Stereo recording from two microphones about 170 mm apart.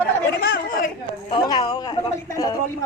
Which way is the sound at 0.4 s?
65° left (ahead or behind).